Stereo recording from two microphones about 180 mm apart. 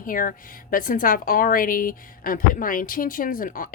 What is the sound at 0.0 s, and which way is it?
A woman's voice, 50° left (ahead or behind).